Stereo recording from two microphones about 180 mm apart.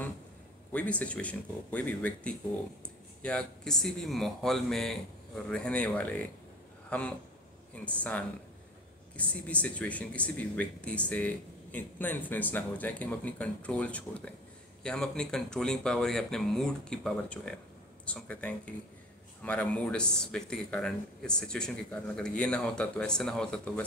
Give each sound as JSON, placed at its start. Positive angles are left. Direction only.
{"t": 0.7, "sound": "a man's voice", "side_deg": 5}